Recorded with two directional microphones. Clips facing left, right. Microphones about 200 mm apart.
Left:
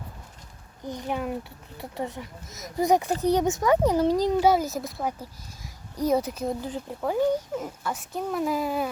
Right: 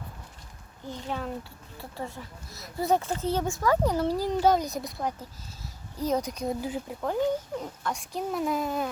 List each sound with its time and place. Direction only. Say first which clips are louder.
0.9 s speech: left 4 dB; 15° left (ahead or behind)